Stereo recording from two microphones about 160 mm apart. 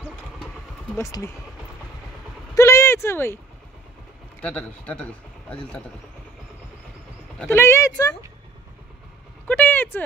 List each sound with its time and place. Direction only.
0.9 s a man's voice: 15° left (ahead or behind)
2.5 s a sound: 20° left (ahead or behind)
4.4 s a man's voice: 5° left (ahead or behind)
7.3 s a man's voice: 15° left (ahead or behind)
9.5 s a man's voice: 10° left (ahead or behind)